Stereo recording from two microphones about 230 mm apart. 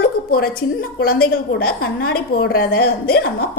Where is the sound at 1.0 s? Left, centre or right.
Left.